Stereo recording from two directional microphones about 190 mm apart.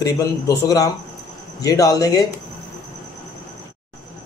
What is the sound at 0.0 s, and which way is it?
Speech, 20° left (ahead or behind).